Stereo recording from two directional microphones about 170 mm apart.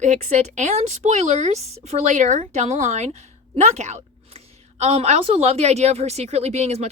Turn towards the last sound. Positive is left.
turn(degrees=-40)  # may be behind; listen again after turning